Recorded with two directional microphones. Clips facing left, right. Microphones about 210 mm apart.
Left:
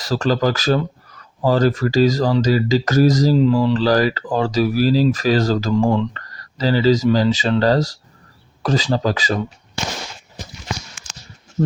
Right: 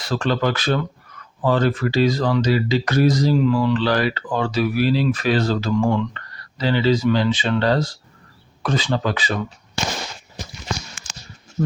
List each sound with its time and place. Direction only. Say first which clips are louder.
0.0 s speech: left 3 dB; 40° left (ahead or behind)